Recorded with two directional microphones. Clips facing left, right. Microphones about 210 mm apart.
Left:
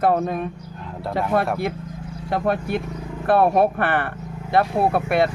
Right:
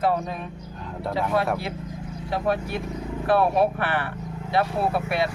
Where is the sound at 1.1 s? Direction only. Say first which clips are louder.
Left 3 dB; 50° left (ahead or behind).